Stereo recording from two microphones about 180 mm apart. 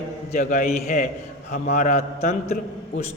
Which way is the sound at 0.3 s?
45° left (ahead or behind).